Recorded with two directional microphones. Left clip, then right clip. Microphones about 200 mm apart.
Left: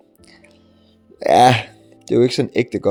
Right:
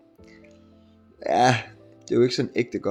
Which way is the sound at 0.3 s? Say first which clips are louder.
Left 3 dB; 45° left (ahead or behind).